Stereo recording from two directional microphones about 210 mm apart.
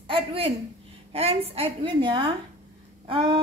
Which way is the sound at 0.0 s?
25° right (ahead or behind).